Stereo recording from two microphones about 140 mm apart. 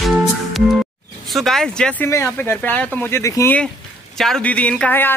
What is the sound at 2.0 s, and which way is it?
Speech, 20° left (ahead or behind).